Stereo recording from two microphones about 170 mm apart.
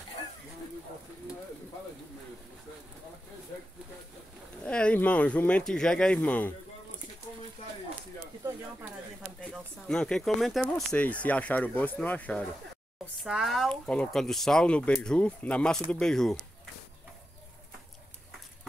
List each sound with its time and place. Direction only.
4.6 s speech: 5° left (ahead or behind)
9.4 s speech: 5° left (ahead or behind)